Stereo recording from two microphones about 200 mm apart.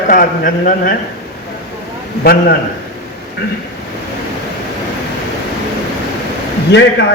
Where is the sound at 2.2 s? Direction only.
50° left (ahead or behind).